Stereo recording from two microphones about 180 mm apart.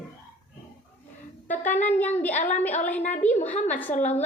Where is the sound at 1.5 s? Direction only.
10° left (ahead or behind).